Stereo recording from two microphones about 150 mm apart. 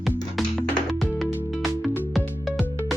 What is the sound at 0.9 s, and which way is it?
Music, centre (ahead or behind).